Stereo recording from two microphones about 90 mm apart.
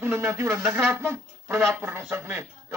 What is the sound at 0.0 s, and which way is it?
A man's voice, 30° right (ahead or behind).